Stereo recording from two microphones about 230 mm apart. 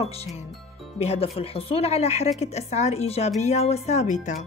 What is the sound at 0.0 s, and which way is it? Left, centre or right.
Speech, left.